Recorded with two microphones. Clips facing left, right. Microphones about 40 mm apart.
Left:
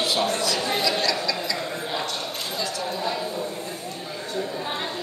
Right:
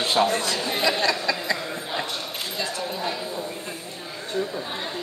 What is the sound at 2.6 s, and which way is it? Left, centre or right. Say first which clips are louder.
Speech: right 1 dB; right.